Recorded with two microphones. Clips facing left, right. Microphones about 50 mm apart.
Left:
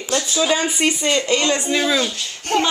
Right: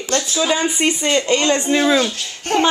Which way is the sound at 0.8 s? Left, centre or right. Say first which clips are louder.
Right 1 dB; centre.